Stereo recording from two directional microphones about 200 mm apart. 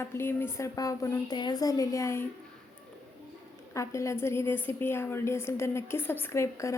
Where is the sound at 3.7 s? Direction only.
15° left (ahead or behind).